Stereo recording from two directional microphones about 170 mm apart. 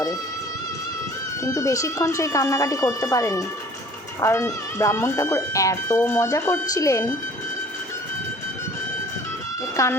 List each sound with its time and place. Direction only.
1.5 s speech: 20° left (ahead or behind)
9.7 s speech: 15° left (ahead or behind)